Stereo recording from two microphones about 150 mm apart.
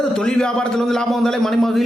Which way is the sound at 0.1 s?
5° left (ahead or behind).